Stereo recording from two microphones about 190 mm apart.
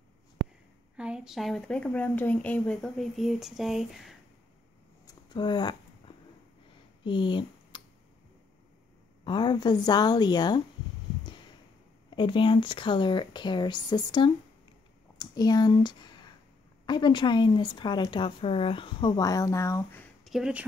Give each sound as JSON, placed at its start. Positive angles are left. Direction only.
{"t": 0.9, "sound": "speech", "side_deg": -5}
{"t": 5.0, "sound": "a sound", "side_deg": 25}
{"t": 9.2, "sound": "speech", "side_deg": 25}
{"t": 12.1, "sound": "speech", "side_deg": 25}
{"t": 20.2, "sound": "speech", "side_deg": -5}